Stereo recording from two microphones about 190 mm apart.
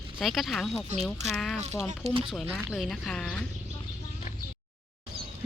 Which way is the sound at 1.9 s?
30° right (ahead or behind).